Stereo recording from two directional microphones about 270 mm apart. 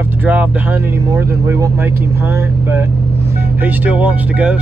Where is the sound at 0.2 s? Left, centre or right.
Centre.